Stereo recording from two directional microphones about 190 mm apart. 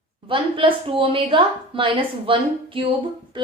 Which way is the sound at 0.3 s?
25° right (ahead or behind).